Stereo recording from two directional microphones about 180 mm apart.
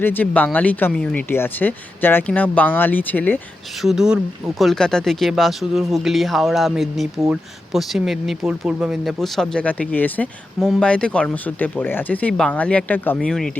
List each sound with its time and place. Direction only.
0.0 s speech: 10° left (ahead or behind)
3.8 s speech: centre (ahead or behind)